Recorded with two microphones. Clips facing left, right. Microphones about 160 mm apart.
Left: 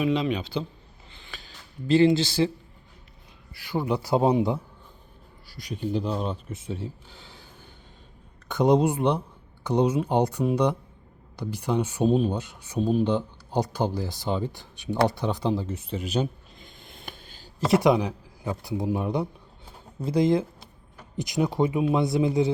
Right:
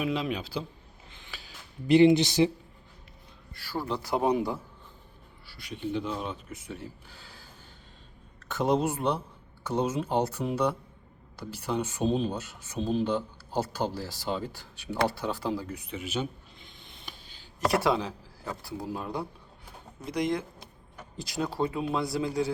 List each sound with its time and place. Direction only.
0.0 s speech: 5° right (ahead or behind)
1.1 s a sound: 5° right (ahead or behind)
3.7 s a man's voice: 15° left (ahead or behind)
5.5 s speech: 40° left (ahead or behind); by 7.3 s 25° left (ahead or behind)
8.4 s a man's voice: 20° left (ahead or behind)
15.0 s a sound: 20° left (ahead or behind); by 17.5 s 45° left (ahead or behind)
17.6 s a man's voice: 20° left (ahead or behind)